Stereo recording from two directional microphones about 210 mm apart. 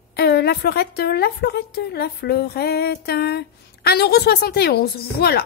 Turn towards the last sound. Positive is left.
turn(degrees=45)  # may be behind; listen again after turning